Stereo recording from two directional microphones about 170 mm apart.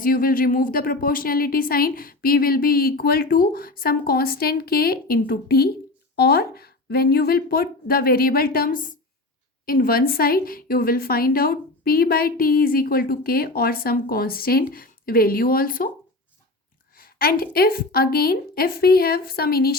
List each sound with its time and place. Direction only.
0.0 s a woman's voice: 55° left (ahead or behind)
17.0 s a woman's voice: 60° left (ahead or behind)